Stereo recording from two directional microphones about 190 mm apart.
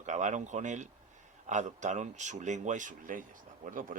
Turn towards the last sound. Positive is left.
turn(degrees=-45)  # may be behind; listen again after turning